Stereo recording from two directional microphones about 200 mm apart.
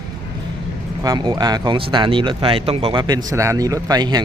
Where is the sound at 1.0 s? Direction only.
20° right (ahead or behind).